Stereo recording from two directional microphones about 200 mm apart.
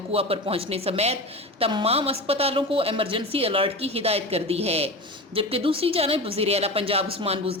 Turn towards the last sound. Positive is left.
turn(degrees=-30)  # may be behind; listen again after turning